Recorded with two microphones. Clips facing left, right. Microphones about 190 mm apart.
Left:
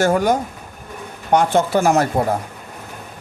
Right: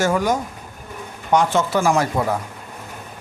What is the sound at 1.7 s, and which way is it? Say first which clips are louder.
Speech: left 2 dB; 40° left (ahead or behind).